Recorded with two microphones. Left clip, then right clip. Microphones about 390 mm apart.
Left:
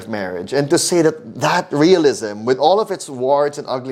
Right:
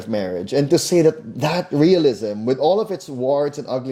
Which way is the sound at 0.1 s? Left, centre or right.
Left.